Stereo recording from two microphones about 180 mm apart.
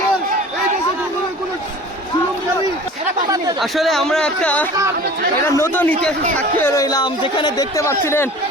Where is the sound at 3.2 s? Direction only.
20° right (ahead or behind).